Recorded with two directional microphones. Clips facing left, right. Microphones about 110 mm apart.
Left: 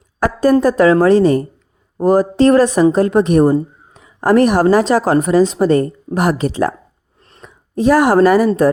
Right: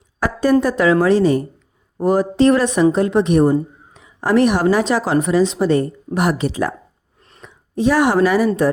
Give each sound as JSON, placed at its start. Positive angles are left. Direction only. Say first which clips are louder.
{"t": 0.2, "sound": "a woman's voice", "louder": "left 3 dB", "side_deg": 40}